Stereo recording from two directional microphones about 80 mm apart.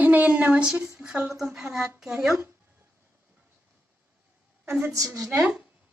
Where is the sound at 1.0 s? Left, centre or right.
Centre.